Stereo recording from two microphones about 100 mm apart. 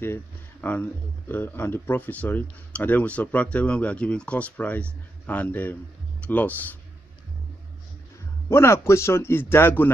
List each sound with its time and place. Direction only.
0.0 s speech: 20° left (ahead or behind)
8.5 s a man's voice: 25° left (ahead or behind)